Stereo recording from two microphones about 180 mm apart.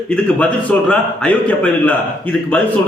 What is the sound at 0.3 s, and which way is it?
A man's voice, 5° left (ahead or behind).